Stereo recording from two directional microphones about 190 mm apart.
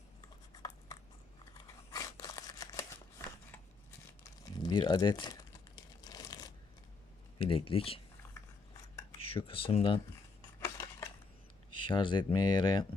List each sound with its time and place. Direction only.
1.5 s scissors: 20° left (ahead or behind)
4.2 s crumpling: 20° left (ahead or behind)
7.3 s speech: 30° left (ahead or behind)
9.1 s speech: 30° left (ahead or behind)
10.6 s cutlery: 15° left (ahead or behind)
11.9 s speech: 25° left (ahead or behind)